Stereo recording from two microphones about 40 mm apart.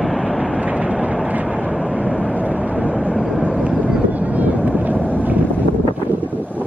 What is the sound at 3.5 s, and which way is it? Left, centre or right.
Vehicle, right.